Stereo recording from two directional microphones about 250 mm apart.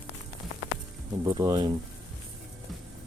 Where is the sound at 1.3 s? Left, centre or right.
Centre.